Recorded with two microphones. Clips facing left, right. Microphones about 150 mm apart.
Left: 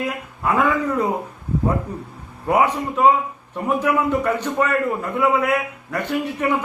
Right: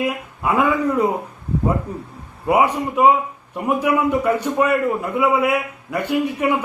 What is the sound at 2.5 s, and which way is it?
A man's voice, 10° right (ahead or behind).